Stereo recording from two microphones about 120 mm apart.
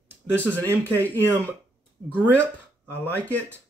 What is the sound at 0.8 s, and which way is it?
Speech, 15° left (ahead or behind).